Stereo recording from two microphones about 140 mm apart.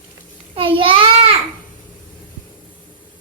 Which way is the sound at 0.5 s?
40° right (ahead or behind).